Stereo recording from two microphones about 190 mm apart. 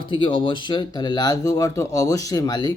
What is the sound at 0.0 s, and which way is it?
A man's voice, 25° left (ahead or behind).